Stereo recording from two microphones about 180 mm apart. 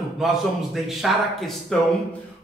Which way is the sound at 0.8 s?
Centre (ahead or behind).